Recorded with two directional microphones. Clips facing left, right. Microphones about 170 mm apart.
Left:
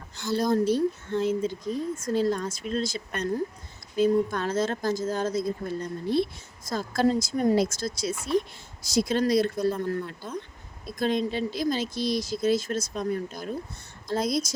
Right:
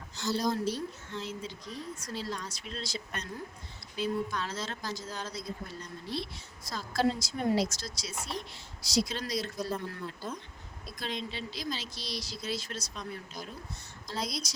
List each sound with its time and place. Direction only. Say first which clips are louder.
0.3 s speech: left 9 dB; 55° left (ahead or behind)
10.8 s speech: left 12 dB; 50° left (ahead or behind)